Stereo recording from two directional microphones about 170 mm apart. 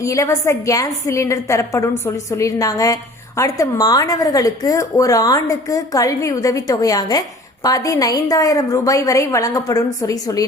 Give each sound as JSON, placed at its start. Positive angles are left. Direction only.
{"t": 0.0, "sound": "a woman's voice", "side_deg": 20}